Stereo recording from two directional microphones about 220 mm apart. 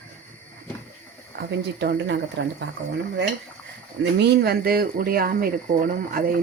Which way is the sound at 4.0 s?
50° right (ahead or behind).